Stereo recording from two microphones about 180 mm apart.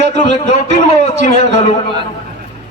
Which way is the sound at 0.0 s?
40° left (ahead or behind).